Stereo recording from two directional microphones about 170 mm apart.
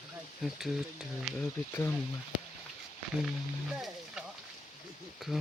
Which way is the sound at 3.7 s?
Centre (ahead or behind).